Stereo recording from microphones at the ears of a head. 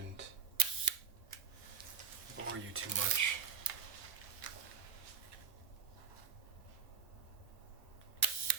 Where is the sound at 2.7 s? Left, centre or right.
Right.